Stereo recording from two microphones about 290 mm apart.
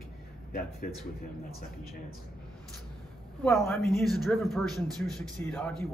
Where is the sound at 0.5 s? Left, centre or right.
Left.